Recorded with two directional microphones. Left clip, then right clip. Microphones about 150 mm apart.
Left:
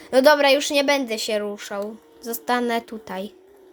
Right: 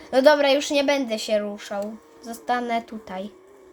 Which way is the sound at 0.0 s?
35° left (ahead or behind).